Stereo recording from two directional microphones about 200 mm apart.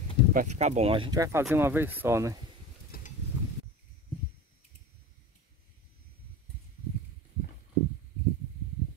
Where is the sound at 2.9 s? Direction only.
50° left (ahead or behind).